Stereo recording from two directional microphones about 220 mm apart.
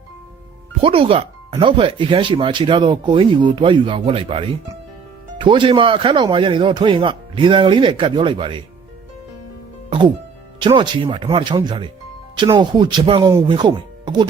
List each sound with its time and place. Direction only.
0.8 s speech: 25° right (ahead or behind)
10.6 s speech: 20° right (ahead or behind)